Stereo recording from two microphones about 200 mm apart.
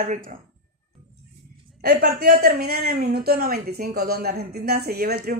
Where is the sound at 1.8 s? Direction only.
50° right (ahead or behind).